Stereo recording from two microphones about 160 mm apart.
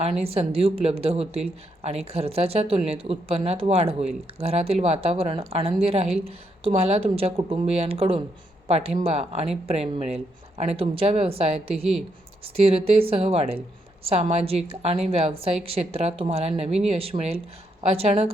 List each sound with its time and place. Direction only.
0.0 s speech: 40° right (ahead or behind)